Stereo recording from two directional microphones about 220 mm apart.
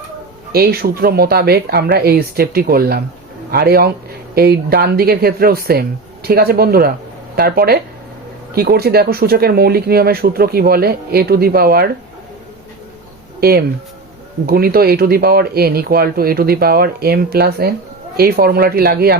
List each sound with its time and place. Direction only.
0.5 s speech: 45° right (ahead or behind)
13.4 s speech: 45° right (ahead or behind)